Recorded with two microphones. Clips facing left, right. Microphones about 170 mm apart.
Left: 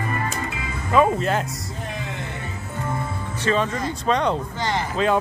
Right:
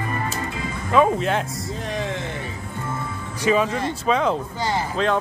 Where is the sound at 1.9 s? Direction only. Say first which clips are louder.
Right 5 dB; 90° right.